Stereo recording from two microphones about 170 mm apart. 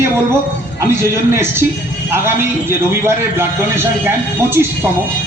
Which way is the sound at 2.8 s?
15° right (ahead or behind).